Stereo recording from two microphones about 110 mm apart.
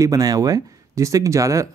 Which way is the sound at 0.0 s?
30° right (ahead or behind).